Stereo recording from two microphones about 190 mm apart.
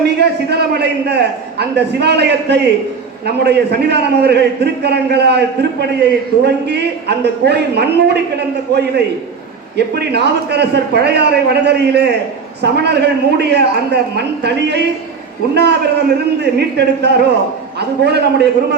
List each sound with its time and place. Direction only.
0.2 s a man's voice: 60° right (ahead or behind)
9.7 s a man's voice: 60° right (ahead or behind)